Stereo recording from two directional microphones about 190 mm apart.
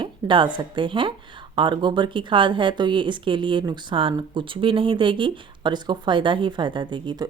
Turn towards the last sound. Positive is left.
turn(degrees=-25)  # may be behind; listen again after turning